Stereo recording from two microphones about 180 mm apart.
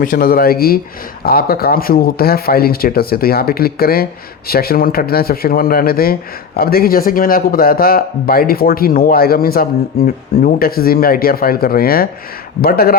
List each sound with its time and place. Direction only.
0.0 s speech: 50° left (ahead or behind)